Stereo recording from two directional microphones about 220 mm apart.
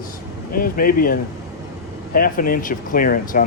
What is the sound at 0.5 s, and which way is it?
Speech, 40° left (ahead or behind).